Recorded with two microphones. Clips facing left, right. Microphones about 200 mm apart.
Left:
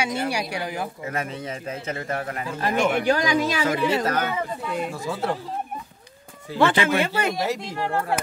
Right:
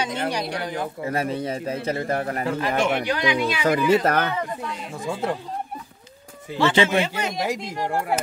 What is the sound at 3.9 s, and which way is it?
Speech, 55° right (ahead or behind).